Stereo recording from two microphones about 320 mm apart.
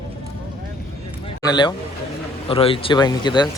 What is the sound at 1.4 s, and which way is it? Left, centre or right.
Speech, centre.